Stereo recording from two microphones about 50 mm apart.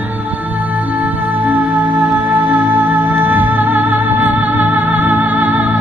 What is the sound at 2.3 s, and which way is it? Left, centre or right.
Music, right.